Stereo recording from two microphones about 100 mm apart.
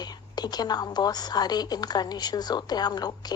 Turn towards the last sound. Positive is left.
turn(degrees=45)  # may be behind; listen again after turning